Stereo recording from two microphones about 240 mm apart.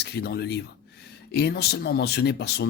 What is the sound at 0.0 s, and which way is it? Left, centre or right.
Speech, left.